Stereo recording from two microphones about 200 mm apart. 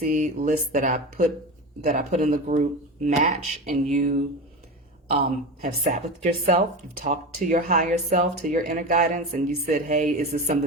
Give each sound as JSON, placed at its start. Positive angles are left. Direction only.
{"t": 0.0, "sound": "speech", "side_deg": -40}
{"t": 5.8, "sound": "speech", "side_deg": -35}